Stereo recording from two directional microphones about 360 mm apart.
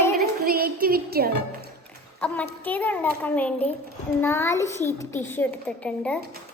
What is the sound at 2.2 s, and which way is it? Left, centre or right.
A child's voice, centre.